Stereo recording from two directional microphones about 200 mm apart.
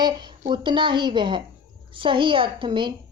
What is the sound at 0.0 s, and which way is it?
Speech, 20° right (ahead or behind).